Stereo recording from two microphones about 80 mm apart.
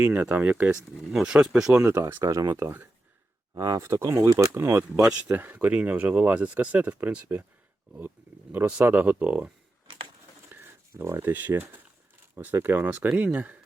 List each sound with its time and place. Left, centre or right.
0.0 s speech: right
0.9 s speech: centre
1.8 s speech: right
3.5 s speech: right
5.3 s speech: right
8.8 s speech: right
9.8 s a sound: right
10.5 s speech: right